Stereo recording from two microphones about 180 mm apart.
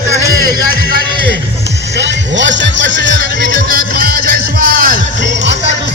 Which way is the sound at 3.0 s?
90° left.